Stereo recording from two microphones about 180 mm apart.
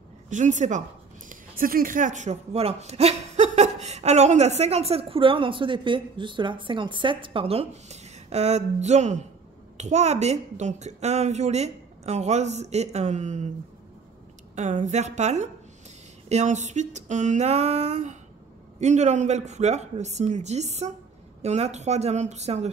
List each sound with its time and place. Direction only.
0.3 s a woman's voice: 45° right (ahead or behind)
1.3 s speech: 50° right (ahead or behind)
14.5 s speech: 40° right (ahead or behind)